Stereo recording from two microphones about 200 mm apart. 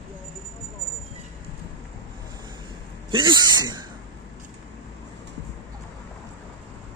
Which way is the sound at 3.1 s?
25° right (ahead or behind).